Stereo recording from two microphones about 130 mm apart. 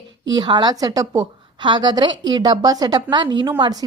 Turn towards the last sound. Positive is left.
turn(degrees=-30)  # may be behind; listen again after turning